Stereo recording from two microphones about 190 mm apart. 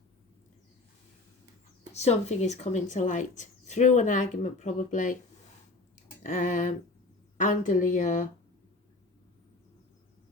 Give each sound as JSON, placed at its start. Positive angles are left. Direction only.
{"t": 1.9, "sound": "speech", "side_deg": 35}
{"t": 6.2, "sound": "speech", "side_deg": 40}